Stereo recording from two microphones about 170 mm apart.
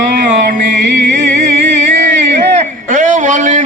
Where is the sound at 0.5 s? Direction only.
45° right (ahead or behind).